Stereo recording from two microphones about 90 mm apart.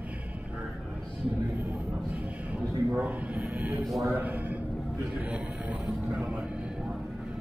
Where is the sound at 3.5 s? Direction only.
15° right (ahead or behind).